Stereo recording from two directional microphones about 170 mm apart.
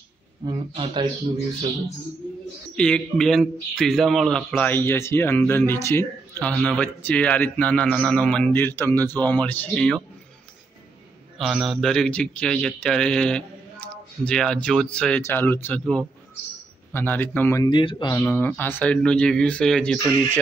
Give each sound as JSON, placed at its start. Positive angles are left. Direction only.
{"t": 0.5, "sound": "speech", "side_deg": -25}
{"t": 2.7, "sound": "a man's voice", "side_deg": 5}
{"t": 11.3, "sound": "a man's voice", "side_deg": 0}
{"t": 17.6, "sound": "speech", "side_deg": 25}
{"t": 18.2, "sound": "a man's voice", "side_deg": 10}